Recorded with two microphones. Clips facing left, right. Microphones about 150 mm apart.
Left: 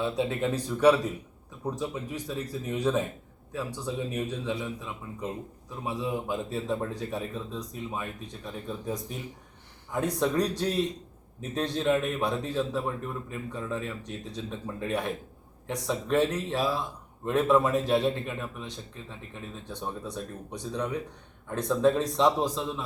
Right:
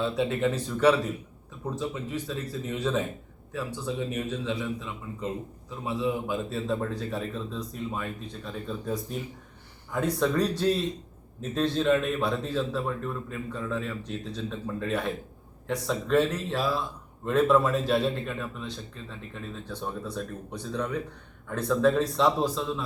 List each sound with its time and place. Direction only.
0.0 s a man's voice: 10° left (ahead or behind)